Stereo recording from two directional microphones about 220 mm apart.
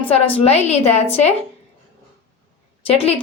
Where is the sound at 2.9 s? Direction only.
25° left (ahead or behind).